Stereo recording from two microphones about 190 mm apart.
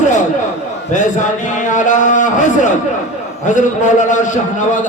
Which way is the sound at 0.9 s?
40° left (ahead or behind).